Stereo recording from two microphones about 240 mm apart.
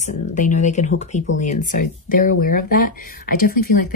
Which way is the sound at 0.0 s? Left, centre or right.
Left.